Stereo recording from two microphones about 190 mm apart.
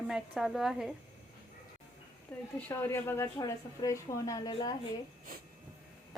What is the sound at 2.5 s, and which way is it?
Speech, 15° left (ahead or behind).